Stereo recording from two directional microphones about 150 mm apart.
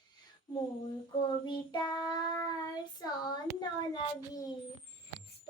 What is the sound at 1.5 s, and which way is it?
Child singing, 30° left (ahead or behind).